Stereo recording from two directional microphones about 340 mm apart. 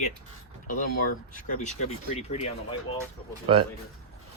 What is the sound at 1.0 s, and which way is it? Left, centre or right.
Speech, left.